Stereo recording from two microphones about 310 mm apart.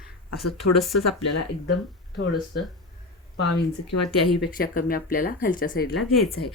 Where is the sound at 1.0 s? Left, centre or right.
Left.